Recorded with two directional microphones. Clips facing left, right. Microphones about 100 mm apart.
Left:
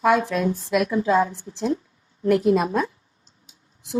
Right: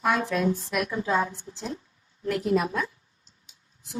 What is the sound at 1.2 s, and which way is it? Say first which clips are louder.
Speech: left 7 dB; 25° left (ahead or behind).